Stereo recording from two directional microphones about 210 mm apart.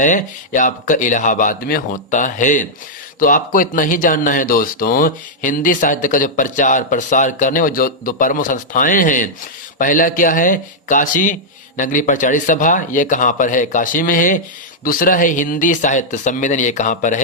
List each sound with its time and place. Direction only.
0.0 s speech: 35° left (ahead or behind)